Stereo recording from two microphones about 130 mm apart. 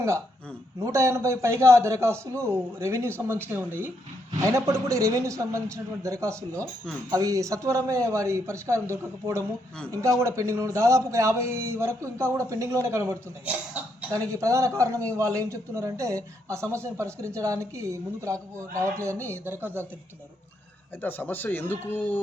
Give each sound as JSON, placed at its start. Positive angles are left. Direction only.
{"t": 0.9, "sound": "a man's voice", "side_deg": -20}
{"t": 21.0, "sound": "speech", "side_deg": 15}